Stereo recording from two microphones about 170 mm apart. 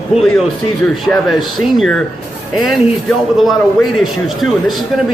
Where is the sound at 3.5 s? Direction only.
Centre (ahead or behind).